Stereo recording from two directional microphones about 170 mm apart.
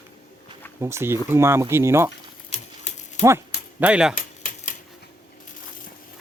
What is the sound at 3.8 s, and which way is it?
Speech, 5° right (ahead or behind).